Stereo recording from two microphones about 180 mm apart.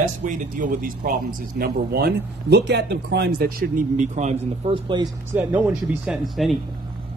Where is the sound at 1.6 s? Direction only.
60° right (ahead or behind); by 4.8 s 40° right (ahead or behind).